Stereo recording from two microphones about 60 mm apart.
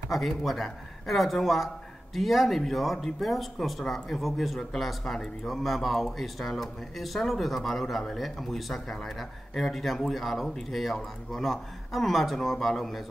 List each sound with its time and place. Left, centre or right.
0.1 s speech: centre